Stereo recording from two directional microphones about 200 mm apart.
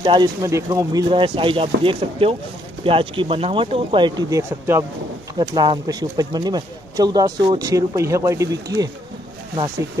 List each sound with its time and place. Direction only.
0.0 s speech: 20° right (ahead or behind)